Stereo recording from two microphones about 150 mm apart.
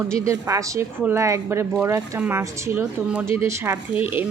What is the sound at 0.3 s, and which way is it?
A woman's voice, 20° right (ahead or behind).